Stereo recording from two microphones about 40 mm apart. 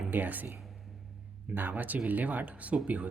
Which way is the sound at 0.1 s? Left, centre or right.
Right.